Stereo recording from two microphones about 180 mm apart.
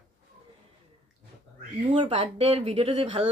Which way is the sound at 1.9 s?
30° right (ahead or behind).